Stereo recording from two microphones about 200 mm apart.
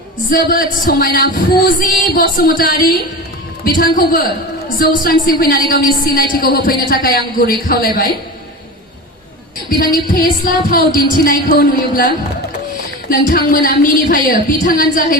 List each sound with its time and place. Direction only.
0.3 s a woman's voice: 45° left (ahead or behind)
9.6 s a woman's voice: 45° left (ahead or behind)
13.3 s a woman's voice: 45° left (ahead or behind)